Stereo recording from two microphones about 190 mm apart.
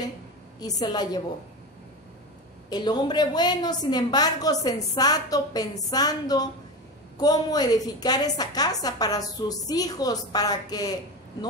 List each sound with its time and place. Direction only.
0.6 s a woman's voice: 20° left (ahead or behind)
2.7 s a woman's voice: 20° left (ahead or behind)